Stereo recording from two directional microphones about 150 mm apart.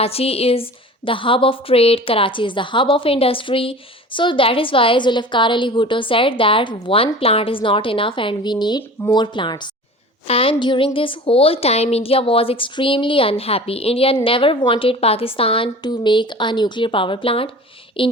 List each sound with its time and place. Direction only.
0.0 s a woman's voice: 40° left (ahead or behind)